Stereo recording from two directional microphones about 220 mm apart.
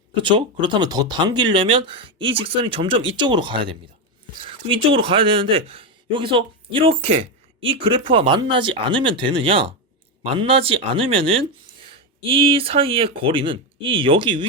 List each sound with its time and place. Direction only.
0.1 s speech: 20° right (ahead or behind)